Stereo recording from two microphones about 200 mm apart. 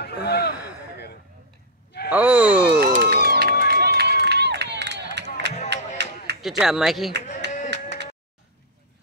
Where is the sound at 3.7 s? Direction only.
50° right (ahead or behind).